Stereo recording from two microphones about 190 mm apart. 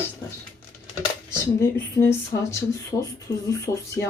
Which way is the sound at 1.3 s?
15° left (ahead or behind).